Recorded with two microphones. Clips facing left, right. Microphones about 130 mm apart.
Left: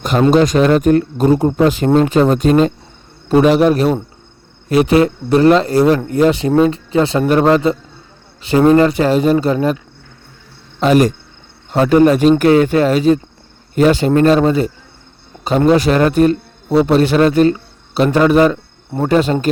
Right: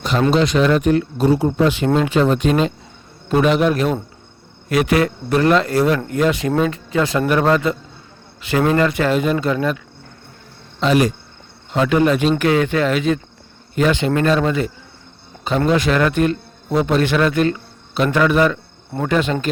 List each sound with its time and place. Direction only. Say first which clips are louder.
0.3 s a man's voice: left 5 dB; 45° left (ahead or behind)
10.8 s a man's voice: left 4 dB; 45° left (ahead or behind)